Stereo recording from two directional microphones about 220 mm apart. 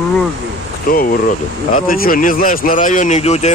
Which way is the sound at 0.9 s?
40° left (ahead or behind).